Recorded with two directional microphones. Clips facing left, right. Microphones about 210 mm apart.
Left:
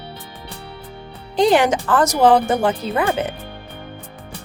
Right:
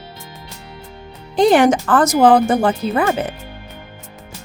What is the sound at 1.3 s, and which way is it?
Speech, 50° right (ahead or behind).